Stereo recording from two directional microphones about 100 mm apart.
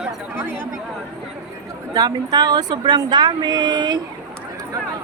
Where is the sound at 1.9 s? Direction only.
40° right (ahead or behind).